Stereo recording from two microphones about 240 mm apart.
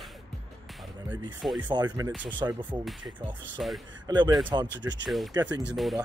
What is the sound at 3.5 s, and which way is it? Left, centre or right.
Speech, centre.